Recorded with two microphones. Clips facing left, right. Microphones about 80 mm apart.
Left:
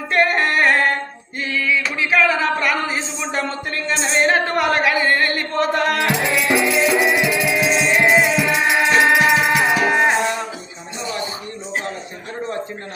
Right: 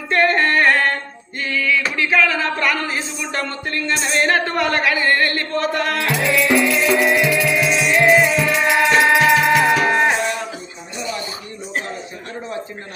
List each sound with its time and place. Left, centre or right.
0.1 s music: centre
1.4 s a sound: centre
7.9 s music: centre